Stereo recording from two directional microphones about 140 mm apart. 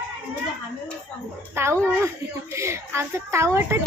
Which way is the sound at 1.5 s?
20° right (ahead or behind).